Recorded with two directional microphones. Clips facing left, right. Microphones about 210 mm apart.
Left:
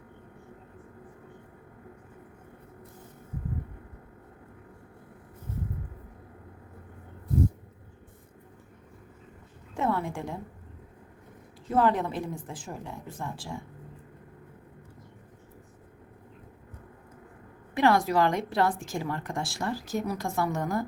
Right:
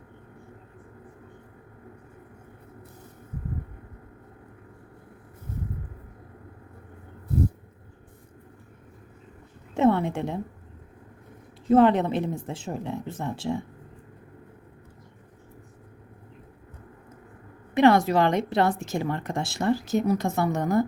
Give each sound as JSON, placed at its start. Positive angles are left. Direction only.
{"t": 9.7, "sound": "a woman's voice", "side_deg": -25}
{"t": 11.7, "sound": "a woman's voice", "side_deg": -20}
{"t": 17.7, "sound": "a woman's voice", "side_deg": -20}